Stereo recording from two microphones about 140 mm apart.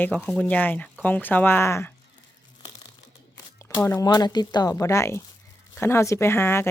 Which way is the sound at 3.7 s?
25° left (ahead or behind).